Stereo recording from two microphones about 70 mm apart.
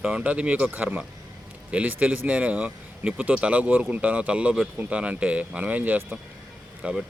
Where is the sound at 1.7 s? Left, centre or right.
Right.